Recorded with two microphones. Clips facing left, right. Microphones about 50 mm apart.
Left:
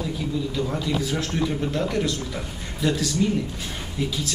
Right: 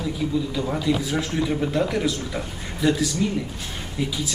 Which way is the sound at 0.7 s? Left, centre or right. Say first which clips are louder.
Right 2 dB; centre.